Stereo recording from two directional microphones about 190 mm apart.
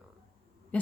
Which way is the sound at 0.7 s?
5° left (ahead or behind).